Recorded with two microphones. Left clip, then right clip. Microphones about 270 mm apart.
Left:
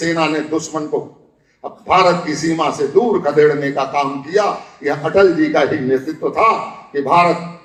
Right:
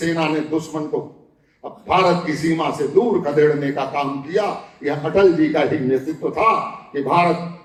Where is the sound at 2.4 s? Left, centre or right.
Left.